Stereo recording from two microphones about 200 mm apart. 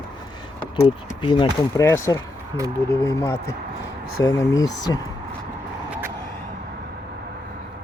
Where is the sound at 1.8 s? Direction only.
15° left (ahead or behind).